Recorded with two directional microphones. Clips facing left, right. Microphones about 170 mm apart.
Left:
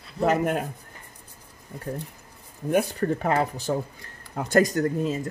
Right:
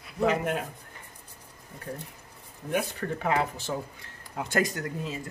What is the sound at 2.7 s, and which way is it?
A man's voice, 40° left (ahead or behind).